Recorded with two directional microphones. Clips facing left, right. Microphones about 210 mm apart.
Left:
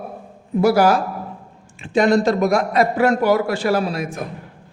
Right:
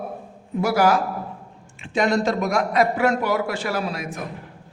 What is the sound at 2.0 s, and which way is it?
A man's voice, 35° left (ahead or behind).